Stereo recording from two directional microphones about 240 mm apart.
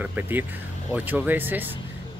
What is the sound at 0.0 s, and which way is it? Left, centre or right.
Speech, centre.